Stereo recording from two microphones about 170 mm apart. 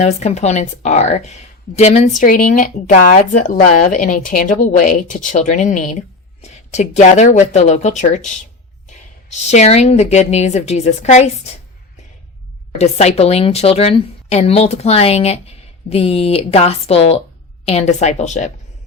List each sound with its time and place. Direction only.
0.0 s a woman's voice: 40° left (ahead or behind)
9.5 s a woman's voice: 40° left (ahead or behind)
12.8 s a woman's voice: 40° left (ahead or behind)